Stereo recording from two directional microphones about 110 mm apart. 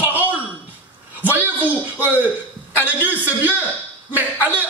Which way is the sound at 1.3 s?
15° right (ahead or behind).